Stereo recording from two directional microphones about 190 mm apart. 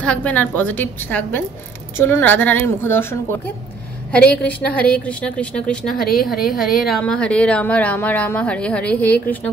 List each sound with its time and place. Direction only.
0.0 s a woman's voice: 5° left (ahead or behind)
6.3 s speech: 50° left (ahead or behind)
6.8 s speech: centre (ahead or behind)